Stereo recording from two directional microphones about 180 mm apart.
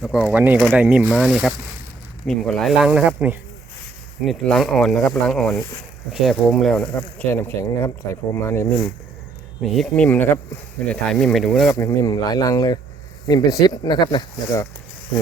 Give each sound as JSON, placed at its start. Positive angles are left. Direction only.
{"t": 0.0, "sound": "speech", "side_deg": 0}
{"t": 11.7, "sound": "speech", "side_deg": 20}